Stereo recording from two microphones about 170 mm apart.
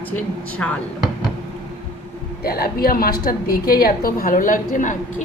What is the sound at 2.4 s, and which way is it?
A woman's voice, 65° left (ahead or behind).